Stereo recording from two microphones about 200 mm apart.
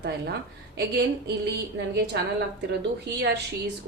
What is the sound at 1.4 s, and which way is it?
A woman's voice, 55° right (ahead or behind).